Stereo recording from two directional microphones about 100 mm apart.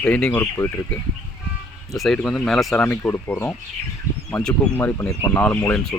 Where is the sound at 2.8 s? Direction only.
15° left (ahead or behind).